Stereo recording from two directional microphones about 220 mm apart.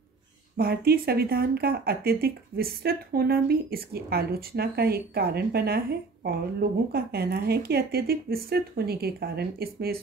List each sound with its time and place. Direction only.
0.6 s speech: 45° right (ahead or behind)